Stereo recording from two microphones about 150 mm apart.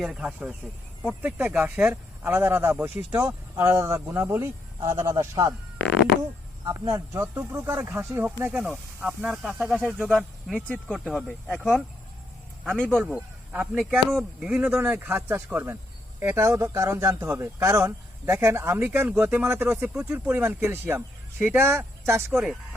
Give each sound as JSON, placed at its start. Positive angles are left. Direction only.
{"t": 0.0, "sound": "speech", "side_deg": -5}
{"t": 6.7, "sound": "speech", "side_deg": -25}
{"t": 10.2, "sound": "speech", "side_deg": 5}
{"t": 13.0, "sound": "speech", "side_deg": -10}
{"t": 22.3, "sound": "speech", "side_deg": 0}